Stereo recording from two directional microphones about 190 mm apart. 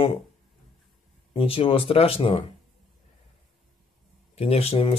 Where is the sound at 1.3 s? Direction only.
30° left (ahead or behind).